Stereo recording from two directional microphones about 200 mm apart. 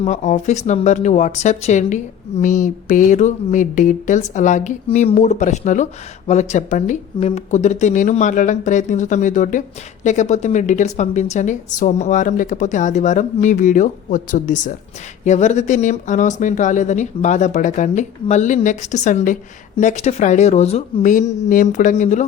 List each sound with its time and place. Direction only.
0.0 s speech: 35° left (ahead or behind)